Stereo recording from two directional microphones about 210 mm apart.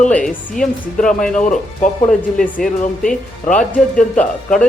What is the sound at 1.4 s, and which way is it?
Speech, 35° left (ahead or behind).